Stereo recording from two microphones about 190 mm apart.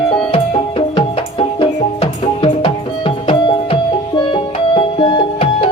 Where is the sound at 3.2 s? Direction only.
25° left (ahead or behind).